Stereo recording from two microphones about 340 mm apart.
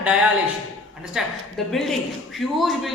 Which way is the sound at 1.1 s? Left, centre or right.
Centre.